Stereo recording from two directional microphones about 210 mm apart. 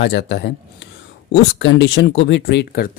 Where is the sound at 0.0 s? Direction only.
50° left (ahead or behind).